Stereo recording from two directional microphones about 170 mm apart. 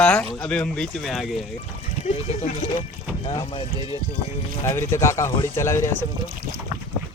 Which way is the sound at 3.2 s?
30° left (ahead or behind).